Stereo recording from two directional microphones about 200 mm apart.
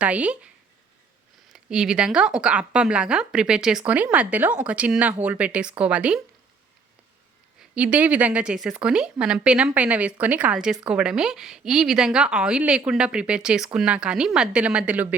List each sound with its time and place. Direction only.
0.0 s speech: 5° right (ahead or behind)
1.5 s speech: 5° right (ahead or behind)
7.6 s speech: 5° right (ahead or behind)